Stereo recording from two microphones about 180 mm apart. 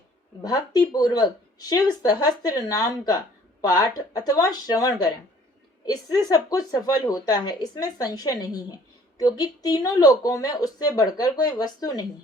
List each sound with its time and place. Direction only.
0.4 s speech: 20° left (ahead or behind)